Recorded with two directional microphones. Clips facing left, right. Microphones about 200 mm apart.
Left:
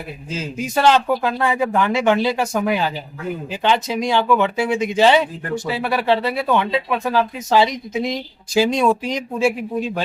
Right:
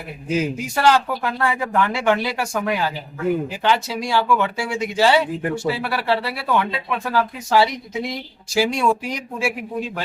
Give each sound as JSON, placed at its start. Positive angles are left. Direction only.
{"t": 0.3, "sound": "a man's voice", "side_deg": -15}
{"t": 0.5, "sound": "speech", "side_deg": 20}